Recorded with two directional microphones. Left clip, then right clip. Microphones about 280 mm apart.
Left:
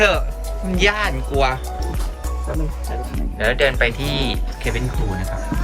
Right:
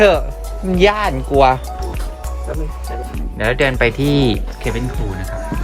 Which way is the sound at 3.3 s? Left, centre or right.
Right.